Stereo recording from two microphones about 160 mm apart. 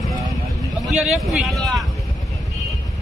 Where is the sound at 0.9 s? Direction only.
Centre (ahead or behind).